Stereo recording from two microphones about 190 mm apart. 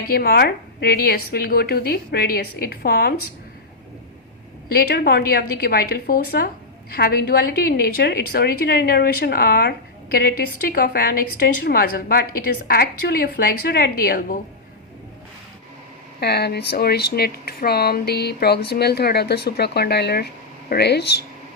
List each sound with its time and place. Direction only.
0.1 s a woman's voice: 55° left (ahead or behind)
4.7 s a woman's voice: 55° left (ahead or behind)
16.2 s speech: 60° left (ahead or behind)